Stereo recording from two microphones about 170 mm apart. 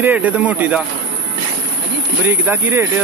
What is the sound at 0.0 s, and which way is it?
Speech, 10° right (ahead or behind).